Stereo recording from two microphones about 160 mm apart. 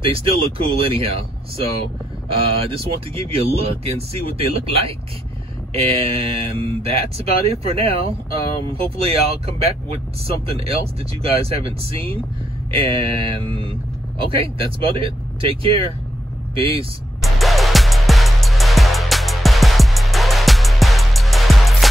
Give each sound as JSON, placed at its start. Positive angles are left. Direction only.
{"t": 0.0, "sound": "speech", "side_deg": -35}
{"t": 2.6, "sound": "speech", "side_deg": -35}
{"t": 17.2, "sound": "music", "side_deg": 0}